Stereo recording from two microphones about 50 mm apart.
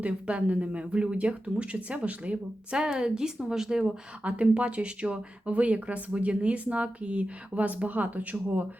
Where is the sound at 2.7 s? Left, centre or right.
Centre.